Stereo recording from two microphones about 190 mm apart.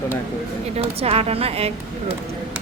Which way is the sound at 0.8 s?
30° right (ahead or behind).